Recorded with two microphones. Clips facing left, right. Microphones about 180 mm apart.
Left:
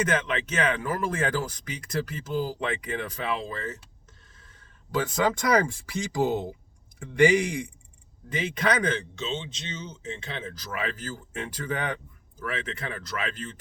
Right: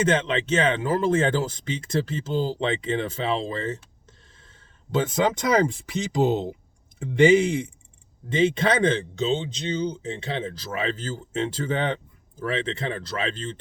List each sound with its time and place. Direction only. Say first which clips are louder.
0.0 s speech: right 4 dB; 25° right (ahead or behind)